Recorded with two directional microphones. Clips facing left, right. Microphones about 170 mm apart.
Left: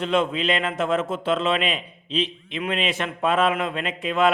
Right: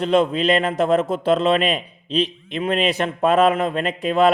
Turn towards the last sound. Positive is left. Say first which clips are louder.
# right 4 dB
turn(degrees=-35)  # may be behind; listen again after turning